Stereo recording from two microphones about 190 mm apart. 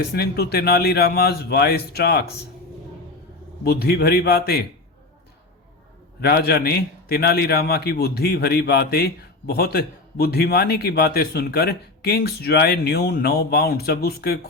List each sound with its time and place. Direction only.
0.1 s a man's voice: 55° left (ahead or behind)
3.6 s a man's voice: 55° left (ahead or behind)
6.2 s a man's voice: 55° left (ahead or behind)